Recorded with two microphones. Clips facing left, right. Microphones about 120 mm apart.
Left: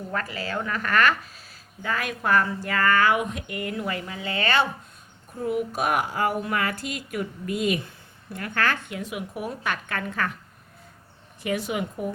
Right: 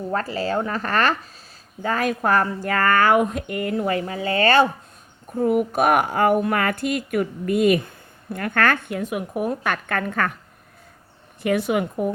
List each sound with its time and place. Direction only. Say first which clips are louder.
0.1 s speech: right 7 dB; 35° right (ahead or behind); by 10.3 s 55° right (ahead or behind)
11.4 s a woman's voice: right 6 dB; 60° right (ahead or behind)